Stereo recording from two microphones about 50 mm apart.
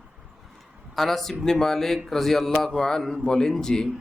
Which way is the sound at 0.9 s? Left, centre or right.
Centre.